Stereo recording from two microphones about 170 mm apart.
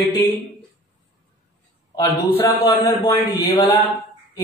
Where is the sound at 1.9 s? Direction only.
20° left (ahead or behind).